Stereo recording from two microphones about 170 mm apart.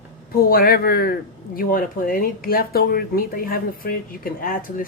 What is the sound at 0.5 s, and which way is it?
Speech, 60° left (ahead or behind).